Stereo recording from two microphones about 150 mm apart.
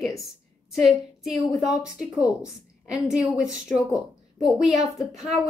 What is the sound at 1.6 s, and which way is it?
A woman's voice, 5° right (ahead or behind).